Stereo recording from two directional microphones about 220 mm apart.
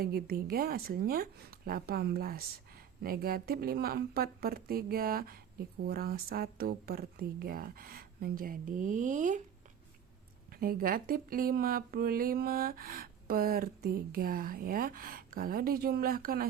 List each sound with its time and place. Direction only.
0.0 s speech: 45° right (ahead or behind)
10.5 s speech: 40° right (ahead or behind)